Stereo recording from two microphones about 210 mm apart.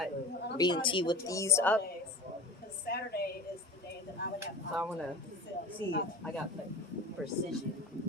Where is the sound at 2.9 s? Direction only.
50° left (ahead or behind).